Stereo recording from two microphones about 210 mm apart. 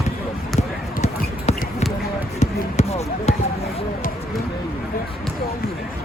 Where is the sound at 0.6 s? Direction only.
30° left (ahead or behind).